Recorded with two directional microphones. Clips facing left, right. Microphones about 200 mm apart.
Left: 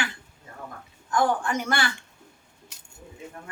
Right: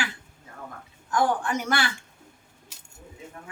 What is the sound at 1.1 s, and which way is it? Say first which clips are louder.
Speech: even; centre (ahead or behind).